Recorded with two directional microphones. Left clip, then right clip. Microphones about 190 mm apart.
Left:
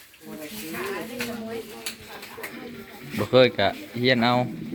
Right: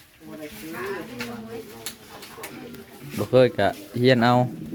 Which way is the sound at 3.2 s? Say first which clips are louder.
Even; 20° right (ahead or behind).